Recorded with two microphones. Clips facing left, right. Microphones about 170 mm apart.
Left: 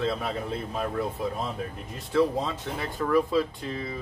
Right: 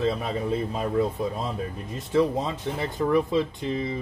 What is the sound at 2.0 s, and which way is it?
Speech, 20° right (ahead or behind).